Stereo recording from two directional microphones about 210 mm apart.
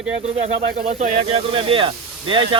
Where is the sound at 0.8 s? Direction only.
30° right (ahead or behind).